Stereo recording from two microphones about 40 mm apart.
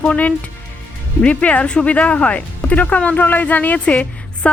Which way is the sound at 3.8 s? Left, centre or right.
Left.